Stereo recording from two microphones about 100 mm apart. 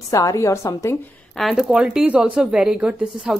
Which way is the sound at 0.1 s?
35° left (ahead or behind).